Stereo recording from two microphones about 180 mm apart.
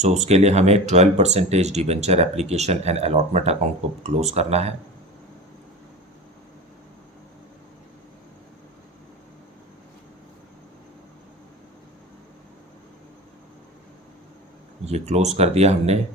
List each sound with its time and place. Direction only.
0.0 s speech: 40° right (ahead or behind)
14.8 s speech: 35° right (ahead or behind)